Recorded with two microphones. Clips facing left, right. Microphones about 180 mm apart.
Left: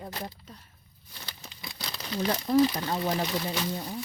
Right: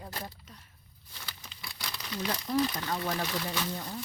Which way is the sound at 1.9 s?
40° left (ahead or behind).